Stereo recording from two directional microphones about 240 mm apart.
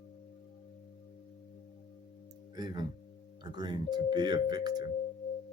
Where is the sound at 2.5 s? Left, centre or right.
Centre.